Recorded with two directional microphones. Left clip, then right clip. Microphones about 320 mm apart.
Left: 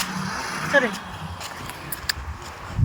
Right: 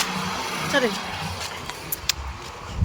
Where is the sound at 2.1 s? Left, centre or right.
Centre.